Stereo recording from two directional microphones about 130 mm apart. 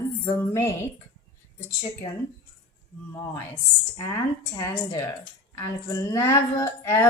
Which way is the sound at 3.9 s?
20° left (ahead or behind).